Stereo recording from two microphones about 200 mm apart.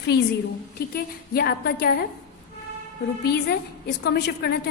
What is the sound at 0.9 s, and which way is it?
A woman's voice, 50° left (ahead or behind).